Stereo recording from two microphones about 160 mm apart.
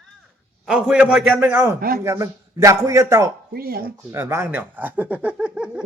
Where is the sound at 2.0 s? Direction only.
20° right (ahead or behind).